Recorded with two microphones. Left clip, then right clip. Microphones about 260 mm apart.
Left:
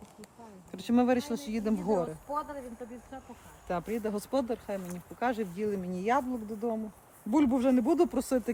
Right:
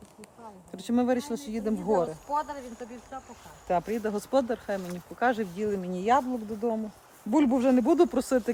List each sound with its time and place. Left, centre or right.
0.7 s speech: centre
2.3 s speech: right
3.7 s speech: centre